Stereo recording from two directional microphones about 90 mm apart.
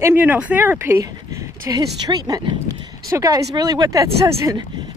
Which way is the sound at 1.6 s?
50° right (ahead or behind).